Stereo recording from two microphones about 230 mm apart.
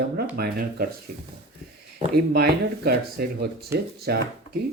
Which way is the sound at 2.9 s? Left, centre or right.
Right.